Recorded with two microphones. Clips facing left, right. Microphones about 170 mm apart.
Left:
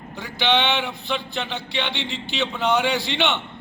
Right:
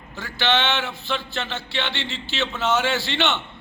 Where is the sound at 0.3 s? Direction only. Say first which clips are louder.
Left 1 dB; 20° left (ahead or behind).